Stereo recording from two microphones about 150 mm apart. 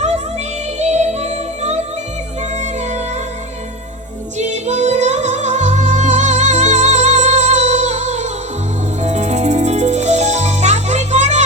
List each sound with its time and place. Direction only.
0.8 s music: 50° right (ahead or behind)
4.4 s music: 50° right (ahead or behind)